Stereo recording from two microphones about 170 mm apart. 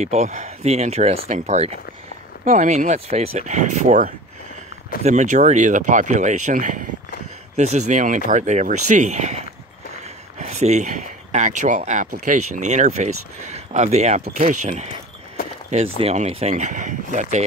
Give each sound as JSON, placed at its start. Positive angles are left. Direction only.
{"t": 0.0, "sound": "speech", "side_deg": -40}
{"t": 2.4, "sound": "speech", "side_deg": -50}
{"t": 10.4, "sound": "speech", "side_deg": -40}